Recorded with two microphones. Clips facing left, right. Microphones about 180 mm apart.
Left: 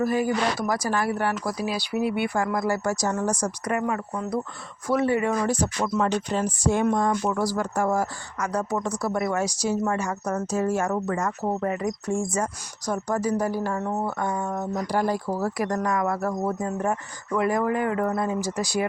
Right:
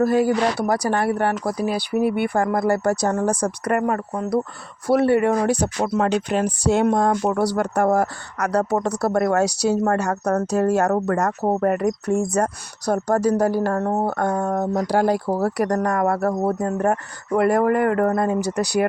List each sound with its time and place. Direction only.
0.0 s speech: 70° right (ahead or behind); by 4.3 s 50° right (ahead or behind)
4.9 s speech: 65° right (ahead or behind)
7.3 s speech: 65° right (ahead or behind)
14.8 s speech: 75° right (ahead or behind)
15.4 s speech: 65° right (ahead or behind)